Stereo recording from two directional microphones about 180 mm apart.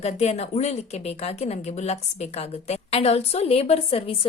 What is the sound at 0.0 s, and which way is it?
A woman's voice, 35° left (ahead or behind).